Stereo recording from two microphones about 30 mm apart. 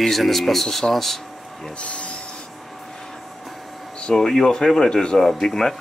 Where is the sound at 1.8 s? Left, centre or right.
Left.